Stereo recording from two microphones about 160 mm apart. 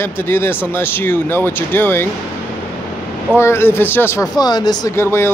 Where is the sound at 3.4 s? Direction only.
15° left (ahead or behind).